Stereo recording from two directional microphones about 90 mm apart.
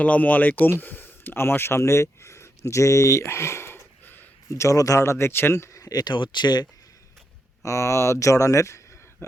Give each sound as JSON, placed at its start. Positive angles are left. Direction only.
{"t": 0.0, "sound": "speech", "side_deg": 20}
{"t": 4.0, "sound": "a sound", "side_deg": 20}
{"t": 4.5, "sound": "speech", "side_deg": 35}
{"t": 6.1, "sound": "speech", "side_deg": 60}
{"t": 7.6, "sound": "speech", "side_deg": 35}